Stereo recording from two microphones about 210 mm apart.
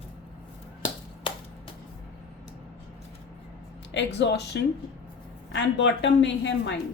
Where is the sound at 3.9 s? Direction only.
55° left (ahead or behind).